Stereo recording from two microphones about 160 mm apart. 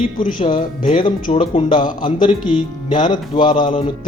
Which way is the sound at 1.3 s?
40° left (ahead or behind).